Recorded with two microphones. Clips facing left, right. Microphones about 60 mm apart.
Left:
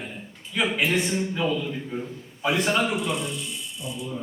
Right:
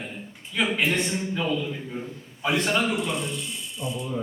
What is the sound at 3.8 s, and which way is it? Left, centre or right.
Speech, right.